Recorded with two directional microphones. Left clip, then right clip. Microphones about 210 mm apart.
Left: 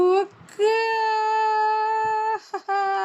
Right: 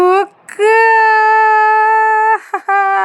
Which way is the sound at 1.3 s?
20° right (ahead or behind).